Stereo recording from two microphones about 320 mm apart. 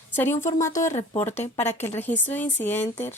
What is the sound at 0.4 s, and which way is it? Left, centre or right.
A woman's voice, centre.